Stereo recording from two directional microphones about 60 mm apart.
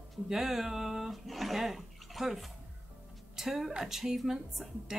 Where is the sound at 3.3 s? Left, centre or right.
Centre.